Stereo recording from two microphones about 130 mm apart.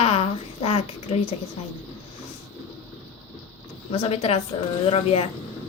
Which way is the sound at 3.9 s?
50° left (ahead or behind).